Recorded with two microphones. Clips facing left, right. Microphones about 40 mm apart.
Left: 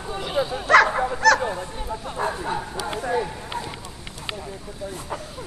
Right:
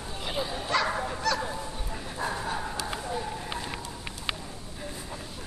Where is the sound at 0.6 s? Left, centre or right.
Left.